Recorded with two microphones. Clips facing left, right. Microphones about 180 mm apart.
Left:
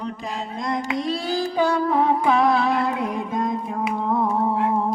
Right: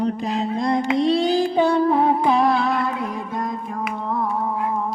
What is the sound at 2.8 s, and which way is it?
Music, 15° left (ahead or behind).